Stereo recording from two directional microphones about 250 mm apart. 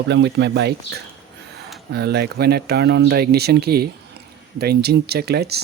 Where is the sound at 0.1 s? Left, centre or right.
Right.